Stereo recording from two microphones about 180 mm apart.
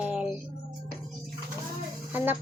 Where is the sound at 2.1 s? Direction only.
10° right (ahead or behind).